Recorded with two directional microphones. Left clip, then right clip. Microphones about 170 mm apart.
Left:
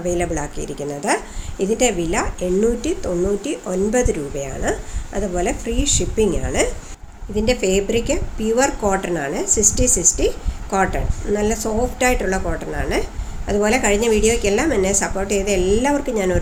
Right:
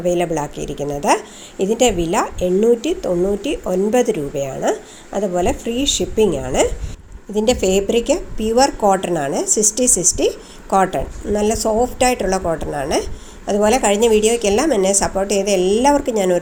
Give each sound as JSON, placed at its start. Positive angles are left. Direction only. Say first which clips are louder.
{"t": 0.0, "sound": "a woman's voice", "louder": "right 4 dB", "side_deg": -30}
{"t": 7.3, "sound": "a woman's voice", "louder": "right 2 dB", "side_deg": -45}